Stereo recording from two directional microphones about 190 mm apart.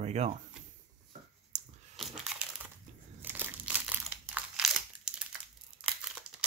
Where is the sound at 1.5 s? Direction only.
40° right (ahead or behind).